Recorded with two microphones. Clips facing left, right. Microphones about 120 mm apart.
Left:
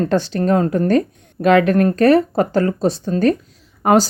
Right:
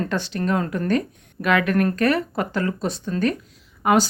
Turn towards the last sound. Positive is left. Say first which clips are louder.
# left 4 dB
turn(degrees=40)  # may be behind; listen again after turning